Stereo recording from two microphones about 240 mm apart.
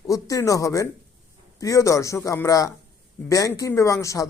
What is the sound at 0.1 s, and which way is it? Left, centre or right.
A man's voice, centre.